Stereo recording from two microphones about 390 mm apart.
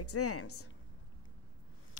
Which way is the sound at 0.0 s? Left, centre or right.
Left.